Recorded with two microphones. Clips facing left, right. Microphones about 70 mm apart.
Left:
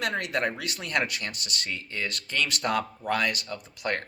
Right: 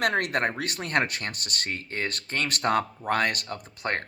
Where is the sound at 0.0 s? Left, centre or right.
Right.